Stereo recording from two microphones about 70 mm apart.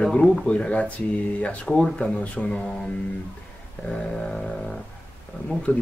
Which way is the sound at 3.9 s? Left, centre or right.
Centre.